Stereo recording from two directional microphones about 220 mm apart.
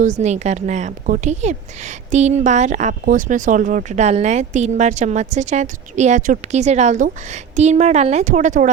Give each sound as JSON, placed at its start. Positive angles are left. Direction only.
{"t": 0.0, "sound": "speech", "side_deg": -30}